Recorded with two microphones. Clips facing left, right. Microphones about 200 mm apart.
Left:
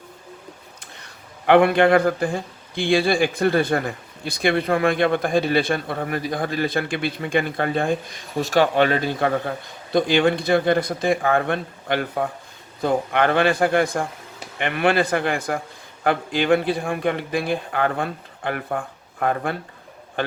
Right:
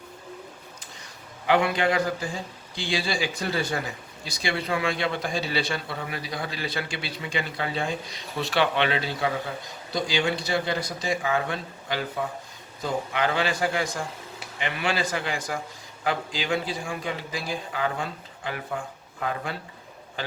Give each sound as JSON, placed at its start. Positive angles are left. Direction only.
{"t": 1.5, "sound": "a man's voice", "side_deg": 55}